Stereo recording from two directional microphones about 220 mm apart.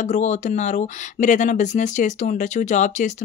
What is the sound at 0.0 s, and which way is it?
Speech, 35° left (ahead or behind).